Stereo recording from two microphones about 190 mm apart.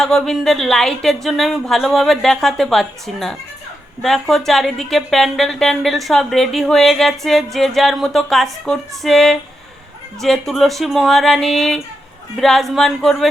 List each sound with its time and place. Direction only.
0.0 s speech: 5° left (ahead or behind)